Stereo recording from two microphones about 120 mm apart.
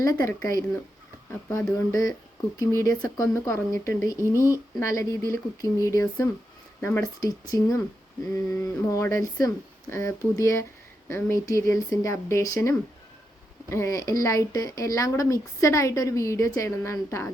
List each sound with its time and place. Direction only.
0.0 s speech: 25° left (ahead or behind)